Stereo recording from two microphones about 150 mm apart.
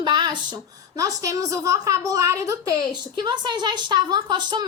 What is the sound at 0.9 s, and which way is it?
Speech, 20° right (ahead or behind).